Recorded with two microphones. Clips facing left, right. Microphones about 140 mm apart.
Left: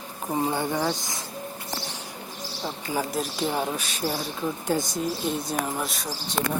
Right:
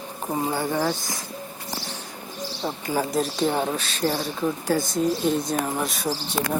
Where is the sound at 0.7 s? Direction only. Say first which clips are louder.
Right 2 dB; 15° left (ahead or behind).